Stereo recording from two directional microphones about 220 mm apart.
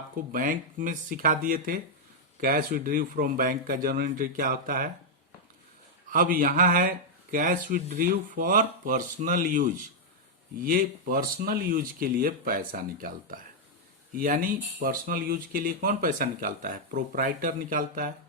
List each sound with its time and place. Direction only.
0.3 s speech: 40° right (ahead or behind)
6.1 s speech: 40° right (ahead or behind)